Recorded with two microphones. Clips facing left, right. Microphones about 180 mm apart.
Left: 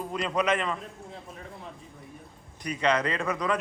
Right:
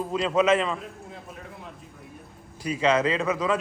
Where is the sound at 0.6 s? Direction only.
5° right (ahead or behind).